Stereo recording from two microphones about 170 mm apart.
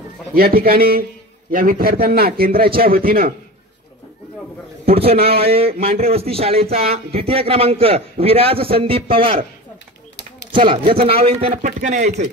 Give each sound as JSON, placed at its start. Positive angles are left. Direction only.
{"t": 0.3, "sound": "a man's voice", "side_deg": -60}
{"t": 4.8, "sound": "a man's voice", "side_deg": -35}
{"t": 10.5, "sound": "a man's voice", "side_deg": -30}